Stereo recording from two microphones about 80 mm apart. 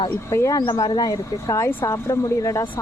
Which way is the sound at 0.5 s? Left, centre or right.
Left.